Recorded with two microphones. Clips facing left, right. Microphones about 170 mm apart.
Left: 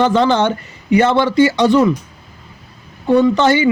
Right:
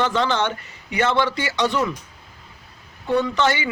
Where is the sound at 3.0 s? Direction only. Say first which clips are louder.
Left 8 dB; 30° left (ahead or behind).